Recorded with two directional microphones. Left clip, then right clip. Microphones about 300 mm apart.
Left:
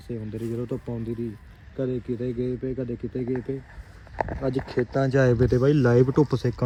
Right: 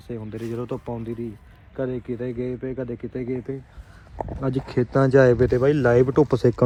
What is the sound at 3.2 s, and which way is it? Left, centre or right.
Speech, right.